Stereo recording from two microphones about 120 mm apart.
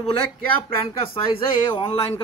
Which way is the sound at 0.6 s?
50° left (ahead or behind).